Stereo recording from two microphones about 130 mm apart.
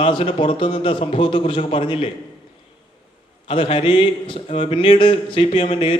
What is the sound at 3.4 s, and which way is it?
Speech, 45° left (ahead or behind).